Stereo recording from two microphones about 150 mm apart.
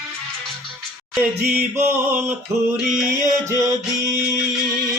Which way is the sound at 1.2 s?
15° right (ahead or behind).